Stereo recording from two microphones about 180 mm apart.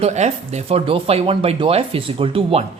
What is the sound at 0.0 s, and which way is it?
A man's voice, 40° right (ahead or behind).